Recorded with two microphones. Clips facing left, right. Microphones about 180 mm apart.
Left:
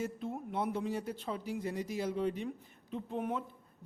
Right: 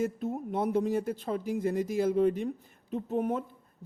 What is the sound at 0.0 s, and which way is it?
Speech, 45° right (ahead or behind).